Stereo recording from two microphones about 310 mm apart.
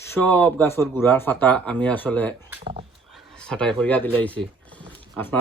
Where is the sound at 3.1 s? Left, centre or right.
Centre.